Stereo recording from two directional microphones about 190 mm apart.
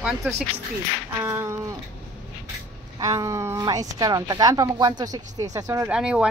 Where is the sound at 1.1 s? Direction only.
15° right (ahead or behind).